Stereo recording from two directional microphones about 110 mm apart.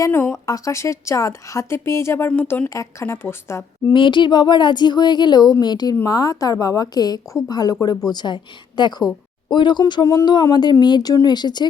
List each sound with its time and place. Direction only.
0.1 s a woman's voice: 20° left (ahead or behind)
2.6 s a woman's voice: 25° left (ahead or behind)
3.9 s speech: 45° left (ahead or behind)
9.8 s speech: 35° left (ahead or behind)